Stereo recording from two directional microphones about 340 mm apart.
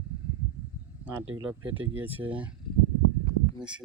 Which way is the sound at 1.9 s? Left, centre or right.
Centre.